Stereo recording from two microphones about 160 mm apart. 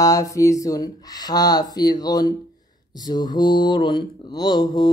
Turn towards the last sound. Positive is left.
turn(degrees=25)  # may be behind; listen again after turning